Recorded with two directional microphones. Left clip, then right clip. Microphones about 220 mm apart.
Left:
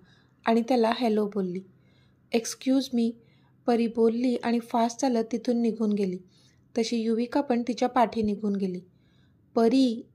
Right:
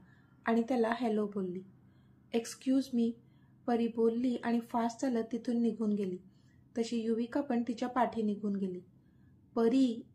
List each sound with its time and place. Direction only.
0.4 s a woman's voice: 40° left (ahead or behind)